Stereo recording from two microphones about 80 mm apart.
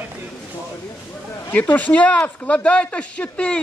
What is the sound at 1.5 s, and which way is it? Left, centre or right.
Speech, left.